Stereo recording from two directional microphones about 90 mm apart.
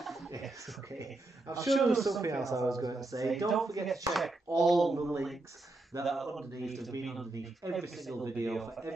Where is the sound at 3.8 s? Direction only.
Centre (ahead or behind).